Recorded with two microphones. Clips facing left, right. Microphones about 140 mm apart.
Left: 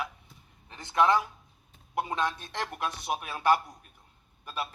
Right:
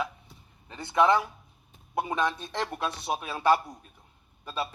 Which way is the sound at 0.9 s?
25° right (ahead or behind).